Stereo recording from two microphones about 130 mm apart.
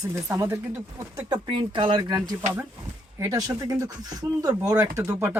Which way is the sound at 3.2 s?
25° right (ahead or behind).